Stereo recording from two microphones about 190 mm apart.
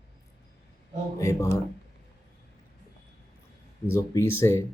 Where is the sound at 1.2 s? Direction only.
15° left (ahead or behind).